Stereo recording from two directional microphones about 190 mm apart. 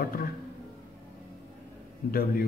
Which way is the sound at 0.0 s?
50° left (ahead or behind).